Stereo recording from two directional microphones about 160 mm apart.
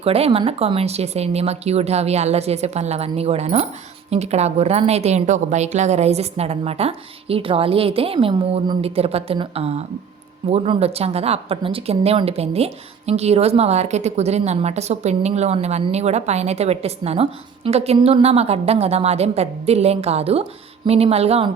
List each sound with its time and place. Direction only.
0.0 s a woman's voice: 40° right (ahead or behind)